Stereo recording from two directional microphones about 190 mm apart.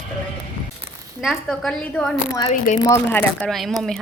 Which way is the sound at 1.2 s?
Centre (ahead or behind).